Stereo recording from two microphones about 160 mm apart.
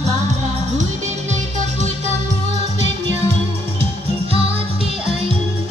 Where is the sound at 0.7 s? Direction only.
50° right (ahead or behind).